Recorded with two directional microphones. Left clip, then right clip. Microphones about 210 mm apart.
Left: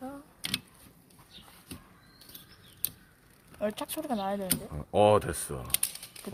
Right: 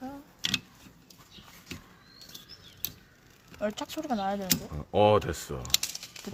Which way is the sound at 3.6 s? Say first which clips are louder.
Even; 25° left (ahead or behind).